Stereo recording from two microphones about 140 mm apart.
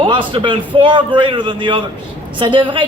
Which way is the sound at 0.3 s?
35° right (ahead or behind).